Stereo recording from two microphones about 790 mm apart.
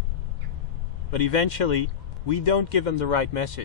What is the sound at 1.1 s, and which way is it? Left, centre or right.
A man's voice, left.